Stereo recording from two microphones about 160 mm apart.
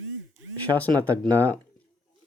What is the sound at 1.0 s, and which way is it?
Speech, 10° left (ahead or behind).